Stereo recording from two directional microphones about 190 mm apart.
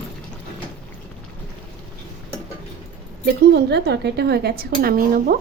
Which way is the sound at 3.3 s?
60° right (ahead or behind).